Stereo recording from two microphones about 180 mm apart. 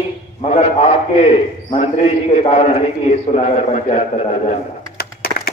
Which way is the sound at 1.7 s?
40° left (ahead or behind).